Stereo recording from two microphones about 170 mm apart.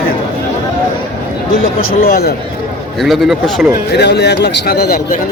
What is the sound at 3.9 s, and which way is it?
A man's voice, 75° left (ahead or behind).